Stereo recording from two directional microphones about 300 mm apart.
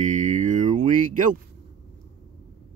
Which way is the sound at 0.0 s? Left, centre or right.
Right.